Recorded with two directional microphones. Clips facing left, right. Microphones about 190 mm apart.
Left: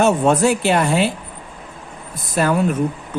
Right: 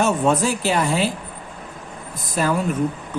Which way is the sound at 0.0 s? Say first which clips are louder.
Left 4 dB; 65° left (ahead or behind).